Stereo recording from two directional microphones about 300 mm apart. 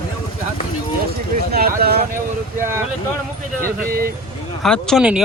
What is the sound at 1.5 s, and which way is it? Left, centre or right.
Speech, right.